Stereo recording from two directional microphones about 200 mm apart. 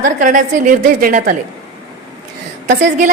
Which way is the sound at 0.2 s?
40° right (ahead or behind).